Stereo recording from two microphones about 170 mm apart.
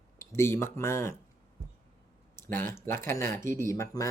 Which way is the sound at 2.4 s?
10° left (ahead or behind).